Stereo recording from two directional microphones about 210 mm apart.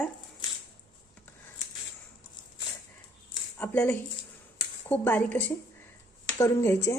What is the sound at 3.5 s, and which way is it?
A woman's voice, 10° left (ahead or behind).